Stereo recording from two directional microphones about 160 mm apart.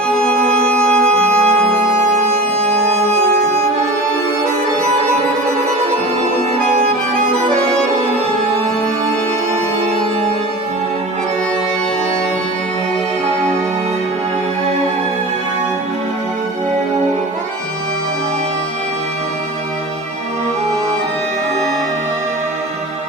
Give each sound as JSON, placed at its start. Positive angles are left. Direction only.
{"t": 0.2, "sound": "organ", "side_deg": 5}
{"t": 2.2, "sound": "organ", "side_deg": -40}